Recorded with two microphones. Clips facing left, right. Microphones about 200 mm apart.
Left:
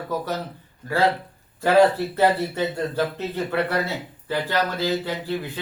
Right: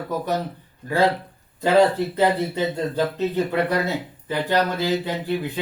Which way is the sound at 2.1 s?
15° right (ahead or behind).